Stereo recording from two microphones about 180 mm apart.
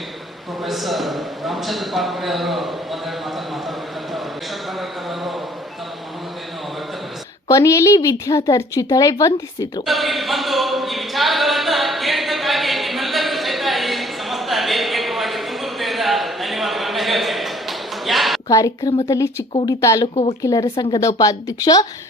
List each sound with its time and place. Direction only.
0.6 s speech: centre (ahead or behind)
7.4 s a woman's voice: 20° left (ahead or behind)
9.8 s a capella: centre (ahead or behind)
18.4 s a woman's voice: 20° left (ahead or behind)